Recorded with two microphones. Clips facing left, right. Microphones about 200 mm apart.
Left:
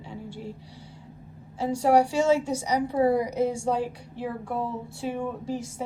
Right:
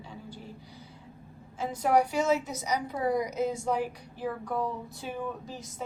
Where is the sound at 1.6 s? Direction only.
30° left (ahead or behind).